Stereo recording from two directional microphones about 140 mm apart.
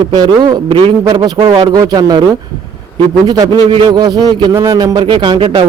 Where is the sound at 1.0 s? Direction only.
30° right (ahead or behind).